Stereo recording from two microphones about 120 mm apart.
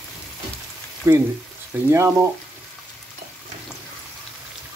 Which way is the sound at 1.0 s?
25° right (ahead or behind).